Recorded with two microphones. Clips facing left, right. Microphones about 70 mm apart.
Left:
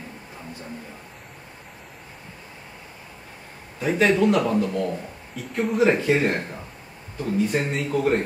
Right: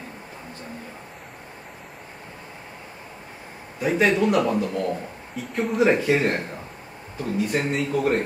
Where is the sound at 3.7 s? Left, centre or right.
Centre.